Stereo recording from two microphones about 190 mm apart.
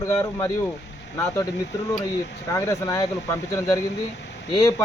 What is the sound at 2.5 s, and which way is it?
Speech, 15° left (ahead or behind).